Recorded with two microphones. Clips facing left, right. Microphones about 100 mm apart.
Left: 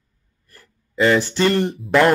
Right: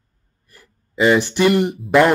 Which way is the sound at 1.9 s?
10° right (ahead or behind).